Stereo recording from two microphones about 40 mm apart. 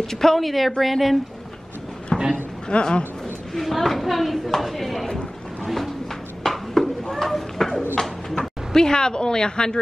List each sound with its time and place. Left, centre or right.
0.0 s speech: centre
2.1 s a sound: left
2.7 s speech: left
3.5 s speech: centre
5.6 s a sound: centre
8.0 s speech: centre